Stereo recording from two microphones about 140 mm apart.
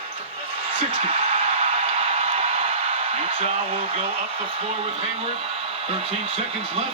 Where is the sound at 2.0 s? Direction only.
45° right (ahead or behind).